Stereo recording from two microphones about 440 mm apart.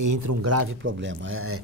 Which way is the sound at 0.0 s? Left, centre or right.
Right.